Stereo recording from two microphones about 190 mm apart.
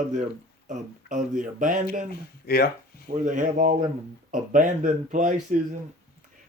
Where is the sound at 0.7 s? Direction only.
40° right (ahead or behind).